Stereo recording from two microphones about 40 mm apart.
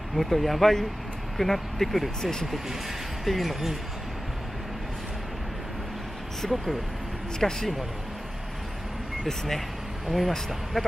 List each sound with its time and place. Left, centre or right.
0.1 s speech: centre
6.5 s speech: centre
9.2 s speech: centre